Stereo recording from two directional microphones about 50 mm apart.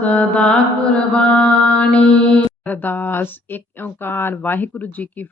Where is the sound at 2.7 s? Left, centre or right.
Left.